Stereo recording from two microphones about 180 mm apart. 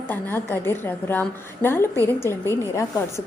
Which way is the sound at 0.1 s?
10° left (ahead or behind).